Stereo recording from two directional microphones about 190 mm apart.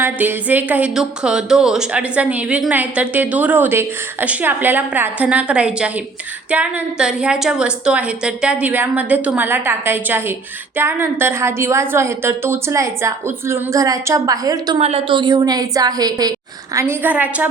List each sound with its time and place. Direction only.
0.0 s speech: 10° right (ahead or behind)
14.8 s a woman's voice: 35° right (ahead or behind); by 17.5 s 10° right (ahead or behind)